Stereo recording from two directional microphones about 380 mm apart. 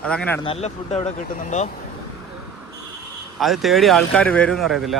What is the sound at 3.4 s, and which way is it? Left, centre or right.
Speech, centre.